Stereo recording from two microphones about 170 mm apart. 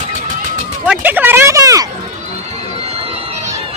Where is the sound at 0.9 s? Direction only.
10° right (ahead or behind).